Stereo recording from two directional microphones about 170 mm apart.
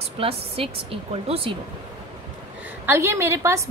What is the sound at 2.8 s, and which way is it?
Speech, 15° right (ahead or behind).